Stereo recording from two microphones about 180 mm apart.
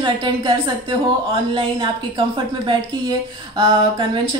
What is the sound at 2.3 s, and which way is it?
Speech, 25° right (ahead or behind).